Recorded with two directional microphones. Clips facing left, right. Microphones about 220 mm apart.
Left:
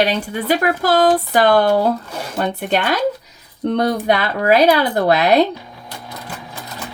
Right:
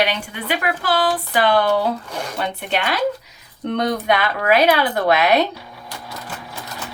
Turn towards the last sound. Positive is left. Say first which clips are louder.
# left 3 dB
turn(degrees=35)  # may be behind; listen again after turning